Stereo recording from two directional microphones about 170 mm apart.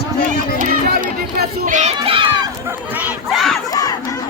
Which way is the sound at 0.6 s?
60° right (ahead or behind).